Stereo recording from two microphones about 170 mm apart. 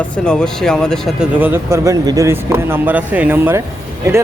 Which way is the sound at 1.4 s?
10° right (ahead or behind).